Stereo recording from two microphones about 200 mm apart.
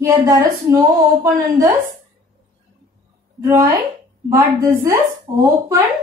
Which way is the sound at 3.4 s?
15° right (ahead or behind).